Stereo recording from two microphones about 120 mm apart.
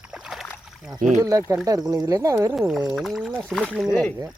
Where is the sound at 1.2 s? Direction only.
30° right (ahead or behind).